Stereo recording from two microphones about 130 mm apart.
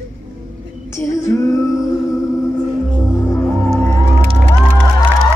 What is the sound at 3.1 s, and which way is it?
Music, 20° left (ahead or behind).